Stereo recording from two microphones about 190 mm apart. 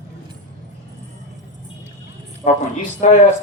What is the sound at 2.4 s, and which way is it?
Speech, 35° left (ahead or behind).